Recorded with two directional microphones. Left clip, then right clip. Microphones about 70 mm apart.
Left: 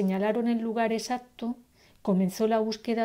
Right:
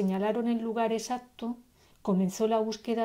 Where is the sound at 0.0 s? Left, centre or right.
Left.